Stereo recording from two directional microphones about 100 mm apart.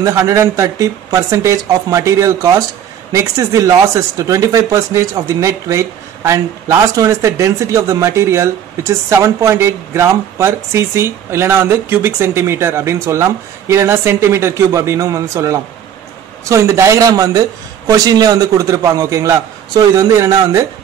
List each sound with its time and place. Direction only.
0.0 s a man's voice: 30° right (ahead or behind)